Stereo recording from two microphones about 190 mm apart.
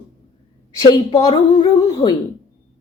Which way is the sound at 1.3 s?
20° left (ahead or behind).